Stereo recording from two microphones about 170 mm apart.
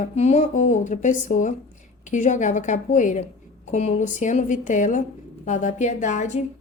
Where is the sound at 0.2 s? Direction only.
40° left (ahead or behind).